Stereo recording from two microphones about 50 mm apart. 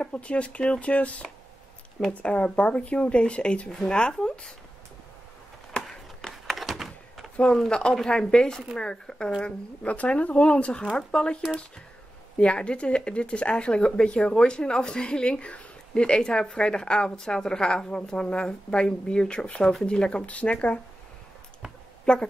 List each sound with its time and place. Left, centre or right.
0.0 s speech: left
2.2 s a woman's voice: left
5.7 s a sound: centre
6.3 s a sound: centre
7.5 s a woman's voice: centre
9.8 s a woman's voice: left
12.4 s a woman's voice: left
20.2 s speech: left
22.1 s speech: centre